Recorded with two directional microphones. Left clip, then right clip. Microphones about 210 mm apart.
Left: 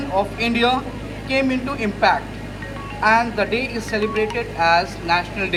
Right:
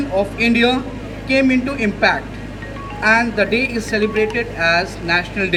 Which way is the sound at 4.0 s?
20° left (ahead or behind).